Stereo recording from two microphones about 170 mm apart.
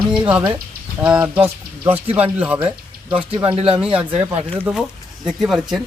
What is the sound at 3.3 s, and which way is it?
Speech, 30° right (ahead or behind).